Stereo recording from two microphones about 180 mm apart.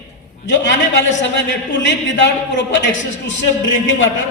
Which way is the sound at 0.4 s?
80° left.